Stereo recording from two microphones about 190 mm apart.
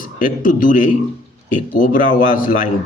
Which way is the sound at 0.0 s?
45° left (ahead or behind).